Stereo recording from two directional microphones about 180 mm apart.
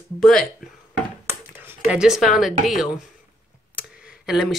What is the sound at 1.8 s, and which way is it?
Speech, 5° right (ahead or behind).